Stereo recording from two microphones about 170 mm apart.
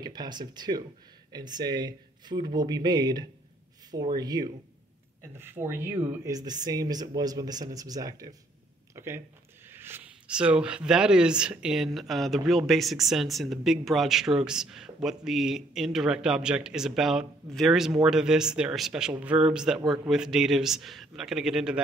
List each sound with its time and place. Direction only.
0.0 s speech: 25° right (ahead or behind); by 21.8 s 5° right (ahead or behind)